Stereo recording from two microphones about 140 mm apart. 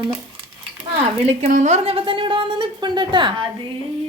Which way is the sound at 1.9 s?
40° right (ahead or behind).